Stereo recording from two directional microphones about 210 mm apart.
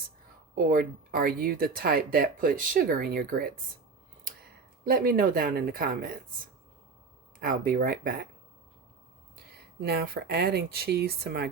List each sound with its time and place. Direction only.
0.5 s speech: 45° right (ahead or behind)
4.8 s speech: 45° right (ahead or behind)
7.3 s speech: 45° right (ahead or behind)
9.5 s speech: 50° right (ahead or behind)